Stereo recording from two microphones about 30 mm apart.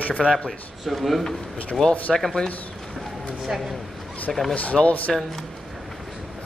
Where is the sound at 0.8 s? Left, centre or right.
Centre.